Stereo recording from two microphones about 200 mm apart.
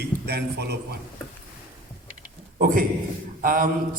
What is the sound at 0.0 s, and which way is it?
Speech, 55° right (ahead or behind).